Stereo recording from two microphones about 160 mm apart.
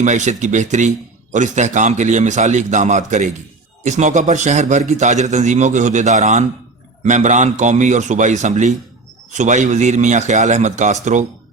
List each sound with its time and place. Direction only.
0.0 s a man's voice: 50° right (ahead or behind)